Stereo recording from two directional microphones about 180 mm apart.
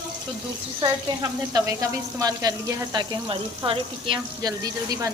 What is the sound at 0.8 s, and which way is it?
Speech, 20° right (ahead or behind).